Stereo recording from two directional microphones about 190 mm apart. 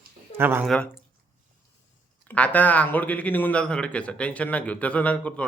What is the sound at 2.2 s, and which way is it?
A man's voice, 10° left (ahead or behind).